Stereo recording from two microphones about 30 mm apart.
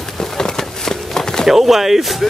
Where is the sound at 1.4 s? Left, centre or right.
Centre.